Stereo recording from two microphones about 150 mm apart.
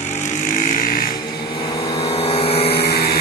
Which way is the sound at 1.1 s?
30° left (ahead or behind).